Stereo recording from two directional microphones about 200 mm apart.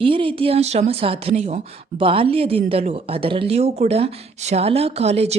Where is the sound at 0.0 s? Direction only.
25° right (ahead or behind).